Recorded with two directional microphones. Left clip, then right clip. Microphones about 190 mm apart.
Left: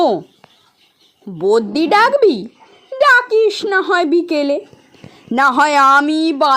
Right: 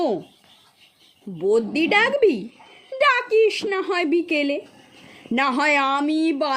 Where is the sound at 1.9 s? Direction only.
15° left (ahead or behind).